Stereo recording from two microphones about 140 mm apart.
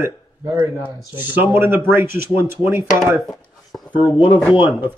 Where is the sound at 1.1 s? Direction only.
15° right (ahead or behind).